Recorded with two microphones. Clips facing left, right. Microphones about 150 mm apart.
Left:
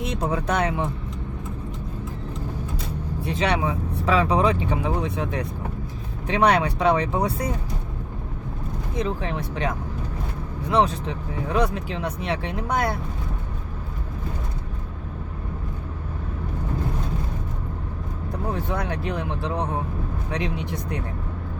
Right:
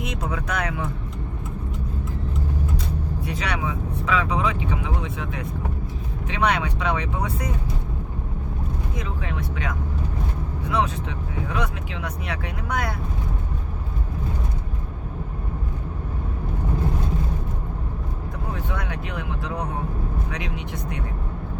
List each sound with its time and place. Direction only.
0.0 s speech: 30° left (ahead or behind)
3.2 s speech: 25° left (ahead or behind)
9.0 s speech: 30° left (ahead or behind)
18.5 s speech: 35° left (ahead or behind)